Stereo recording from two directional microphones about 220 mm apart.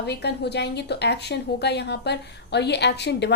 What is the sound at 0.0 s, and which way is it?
Speech, 50° left (ahead or behind).